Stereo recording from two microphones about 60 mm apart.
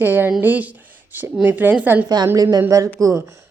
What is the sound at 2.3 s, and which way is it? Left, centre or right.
Speech, right.